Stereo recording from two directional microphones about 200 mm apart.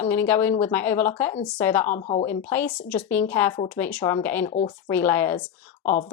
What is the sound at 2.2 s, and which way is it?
A woman's voice, 10° left (ahead or behind).